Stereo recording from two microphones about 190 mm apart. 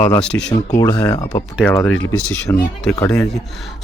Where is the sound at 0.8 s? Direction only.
20° left (ahead or behind).